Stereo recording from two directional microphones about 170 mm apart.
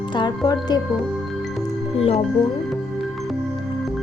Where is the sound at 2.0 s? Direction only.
35° left (ahead or behind).